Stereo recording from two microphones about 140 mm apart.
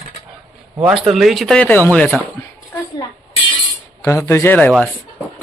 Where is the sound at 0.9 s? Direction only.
Centre (ahead or behind).